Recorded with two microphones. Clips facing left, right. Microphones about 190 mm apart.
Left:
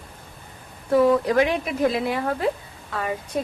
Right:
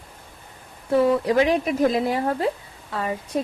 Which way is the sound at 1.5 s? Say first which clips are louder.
Right 2 dB; 35° right (ahead or behind).